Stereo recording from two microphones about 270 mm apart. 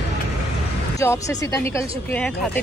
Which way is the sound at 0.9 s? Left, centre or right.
Centre.